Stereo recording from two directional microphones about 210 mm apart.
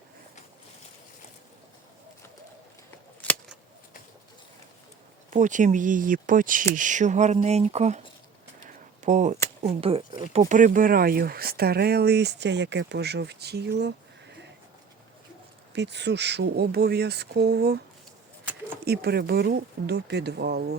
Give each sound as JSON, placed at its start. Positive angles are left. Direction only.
{"t": 3.2, "sound": "a sound", "side_deg": 5}
{"t": 5.3, "sound": "speech", "side_deg": -35}
{"t": 8.6, "sound": "a sound", "side_deg": -35}
{"t": 9.6, "sound": "speech", "side_deg": -25}
{"t": 15.7, "sound": "speech", "side_deg": -55}
{"t": 18.9, "sound": "speech", "side_deg": -50}